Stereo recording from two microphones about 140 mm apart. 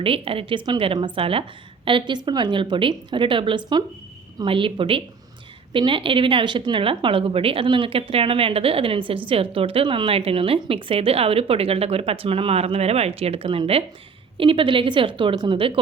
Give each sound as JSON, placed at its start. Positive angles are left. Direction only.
{"t": 0.0, "sound": "a woman's voice", "side_deg": -40}